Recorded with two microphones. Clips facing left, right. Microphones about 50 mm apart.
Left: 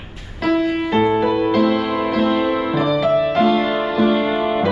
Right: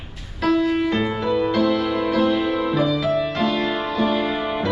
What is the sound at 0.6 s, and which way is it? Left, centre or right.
Music, centre.